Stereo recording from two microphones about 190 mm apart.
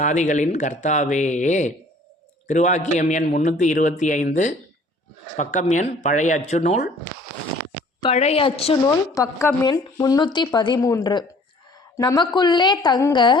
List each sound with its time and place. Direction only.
0.0 s a man's voice: 40° left (ahead or behind)
8.0 s a man's voice: 35° left (ahead or behind)
9.1 s a woman's voice: 15° left (ahead or behind)